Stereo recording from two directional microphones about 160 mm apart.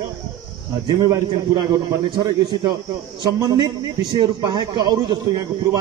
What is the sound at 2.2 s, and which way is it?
A man's voice, 25° right (ahead or behind).